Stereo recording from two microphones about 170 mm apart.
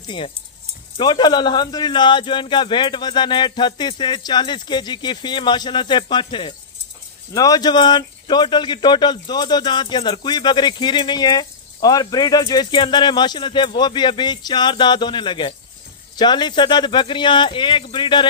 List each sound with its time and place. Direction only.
0.0 s speech: 30° left (ahead or behind)